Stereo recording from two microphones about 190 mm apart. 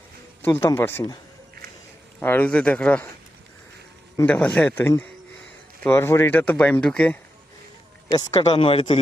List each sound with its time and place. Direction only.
0.4 s speech: 15° left (ahead or behind)
2.2 s speech: 10° left (ahead or behind)
4.2 s speech: 10° left (ahead or behind)
8.0 s speech: 20° left (ahead or behind)